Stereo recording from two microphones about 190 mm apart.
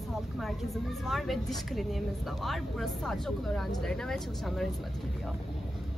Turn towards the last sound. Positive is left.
turn(degrees=0)  # may be behind; listen again after turning